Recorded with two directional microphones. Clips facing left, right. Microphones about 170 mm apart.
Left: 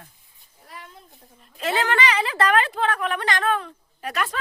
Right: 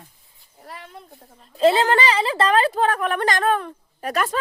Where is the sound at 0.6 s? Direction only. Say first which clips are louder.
Right 4 dB; 70° right (ahead or behind).